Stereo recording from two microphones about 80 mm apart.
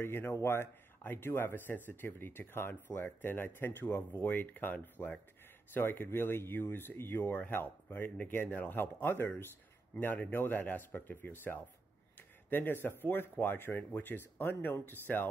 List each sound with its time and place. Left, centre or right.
0.0 s speech: left